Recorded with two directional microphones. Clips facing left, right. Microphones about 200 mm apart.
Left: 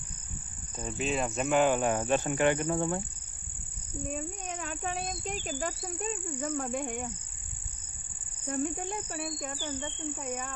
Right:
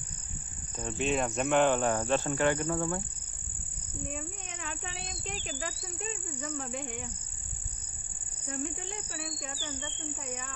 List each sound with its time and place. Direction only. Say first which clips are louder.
0.7 s speech: right 1 dB; centre (ahead or behind); by 3.0 s 20° left (ahead or behind)
4.1 s speech: left 4 dB; 45° left (ahead or behind)
8.5 s speech: left 5 dB; 50° left (ahead or behind)